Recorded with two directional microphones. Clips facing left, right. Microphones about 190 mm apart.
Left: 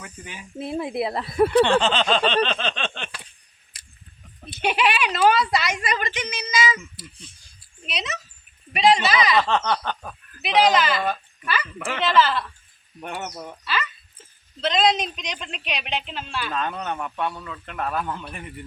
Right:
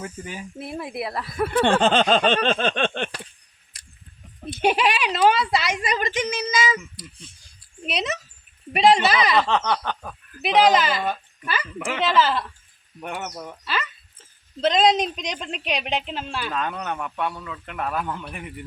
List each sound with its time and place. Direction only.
0.0 s a woman's voice: 40° right (ahead or behind)
0.6 s speech: 20° left (ahead or behind)
1.5 s a sound: 50° right (ahead or behind)
3.7 s a sound: centre (ahead or behind)
4.6 s a woman's voice: 40° right (ahead or behind)
7.9 s a woman's voice: 55° right (ahead or behind)
9.4 s speech: 15° right (ahead or behind)
12.1 s a woman's voice: 40° right (ahead or behind)
13.1 s speech: 5° left (ahead or behind)
14.6 s a woman's voice: 45° right (ahead or behind)
16.4 s speech: 10° right (ahead or behind)